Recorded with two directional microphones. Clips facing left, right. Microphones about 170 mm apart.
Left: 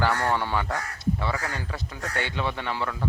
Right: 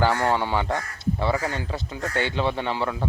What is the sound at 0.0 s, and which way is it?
A man's voice, 20° right (ahead or behind).